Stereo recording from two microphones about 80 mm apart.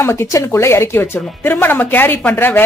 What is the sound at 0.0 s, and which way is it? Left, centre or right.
A woman's voice, left.